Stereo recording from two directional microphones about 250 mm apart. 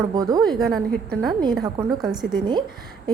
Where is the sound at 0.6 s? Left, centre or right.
Centre.